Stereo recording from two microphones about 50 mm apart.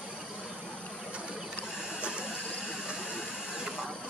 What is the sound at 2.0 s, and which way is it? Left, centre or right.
Engine, centre.